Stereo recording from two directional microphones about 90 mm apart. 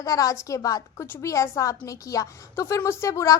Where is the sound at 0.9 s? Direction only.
25° left (ahead or behind).